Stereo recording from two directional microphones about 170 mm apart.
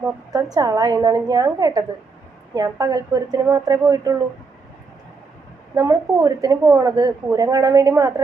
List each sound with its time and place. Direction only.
0.5 s a woman's voice: 20° right (ahead or behind)
5.7 s a woman's voice: 20° right (ahead or behind)